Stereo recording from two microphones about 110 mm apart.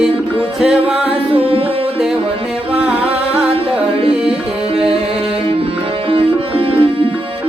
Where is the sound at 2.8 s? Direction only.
10° right (ahead or behind).